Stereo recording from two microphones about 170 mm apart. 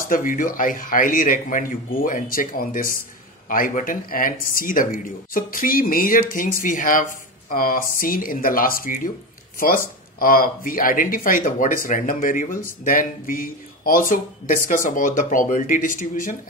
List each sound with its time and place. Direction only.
0.1 s speech: 50° left (ahead or behind)